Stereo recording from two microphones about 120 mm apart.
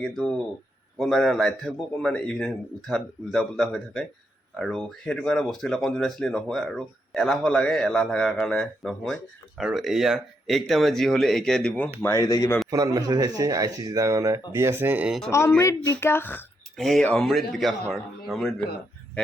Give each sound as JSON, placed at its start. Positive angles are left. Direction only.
{"t": 0.0, "sound": "speech", "side_deg": 5}
{"t": 12.0, "sound": "a woman's voice", "side_deg": 25}
{"t": 12.7, "sound": "speech", "side_deg": -30}
{"t": 15.3, "sound": "a woman's voice", "side_deg": 25}
{"t": 16.7, "sound": "speech", "side_deg": 0}